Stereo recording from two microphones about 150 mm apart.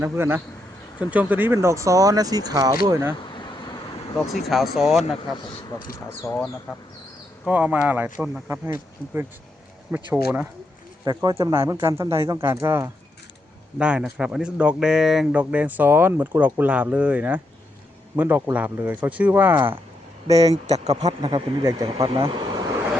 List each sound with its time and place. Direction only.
0.0 s speech: 15° right (ahead or behind)
4.3 s speech: centre (ahead or behind)
6.2 s speech: 20° left (ahead or behind)
7.4 s speech: 10° right (ahead or behind)
11.0 s speech: 25° right (ahead or behind)
13.7 s speech: 5° right (ahead or behind)
20.2 s speech: 25° right (ahead or behind)
20.5 s speech: 45° right (ahead or behind)
21.0 s speech: 30° right (ahead or behind)
22.3 s vehicle: 30° right (ahead or behind)